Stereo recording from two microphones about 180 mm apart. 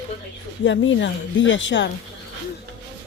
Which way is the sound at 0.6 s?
90° left.